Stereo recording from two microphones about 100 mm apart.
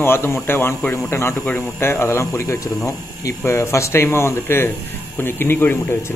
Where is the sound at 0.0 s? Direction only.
25° left (ahead or behind).